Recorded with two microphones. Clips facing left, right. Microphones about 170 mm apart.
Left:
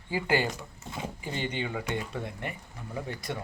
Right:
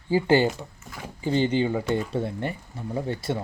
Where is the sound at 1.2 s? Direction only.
30° right (ahead or behind).